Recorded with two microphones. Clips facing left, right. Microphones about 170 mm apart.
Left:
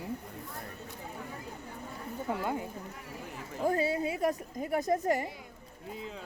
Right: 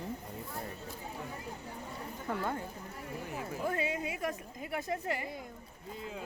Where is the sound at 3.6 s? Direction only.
35° left (ahead or behind).